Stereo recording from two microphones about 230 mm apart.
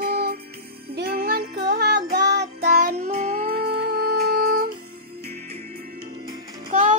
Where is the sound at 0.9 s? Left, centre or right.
Right.